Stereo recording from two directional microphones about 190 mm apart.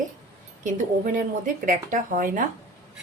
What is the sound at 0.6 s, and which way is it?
Speech, 45° right (ahead or behind).